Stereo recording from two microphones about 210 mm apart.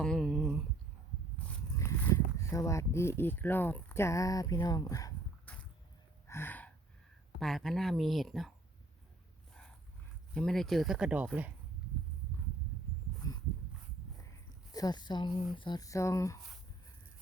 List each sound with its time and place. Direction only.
0.0 s a sound: 5° left (ahead or behind)
6.2 s gasp: 10° left (ahead or behind)
7.3 s speech: centre (ahead or behind)
10.3 s speech: centre (ahead or behind)
13.2 s dog: 15° left (ahead or behind)
14.7 s speech: 20° left (ahead or behind)